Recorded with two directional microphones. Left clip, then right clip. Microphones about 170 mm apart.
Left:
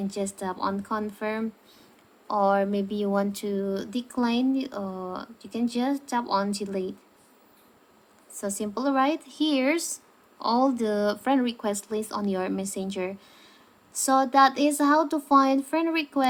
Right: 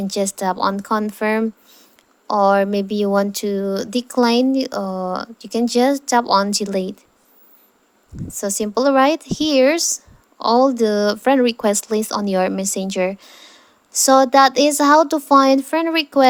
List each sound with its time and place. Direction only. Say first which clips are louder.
0.1 s speech: right 11 dB; 50° right (ahead or behind)
8.3 s speech: right 9 dB; 40° right (ahead or behind)